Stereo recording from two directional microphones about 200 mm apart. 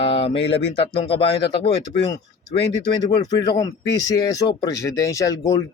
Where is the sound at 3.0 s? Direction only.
20° left (ahead or behind).